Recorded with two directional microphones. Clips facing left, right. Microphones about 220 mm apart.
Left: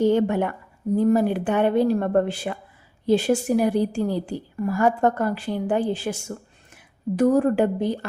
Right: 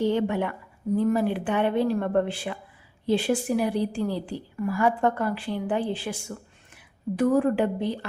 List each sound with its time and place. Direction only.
0.0 s a woman's voice: 45° left (ahead or behind)